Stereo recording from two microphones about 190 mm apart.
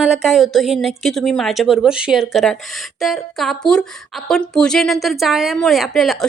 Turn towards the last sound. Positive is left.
turn(degrees=0)  # may be behind; listen again after turning